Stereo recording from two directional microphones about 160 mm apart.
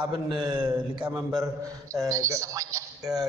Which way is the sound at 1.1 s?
5° right (ahead or behind).